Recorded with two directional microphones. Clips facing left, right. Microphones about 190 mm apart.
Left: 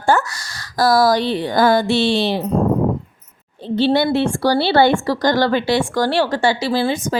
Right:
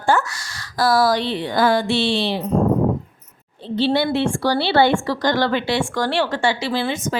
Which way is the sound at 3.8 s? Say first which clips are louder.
Left 3 dB; 45° left (ahead or behind).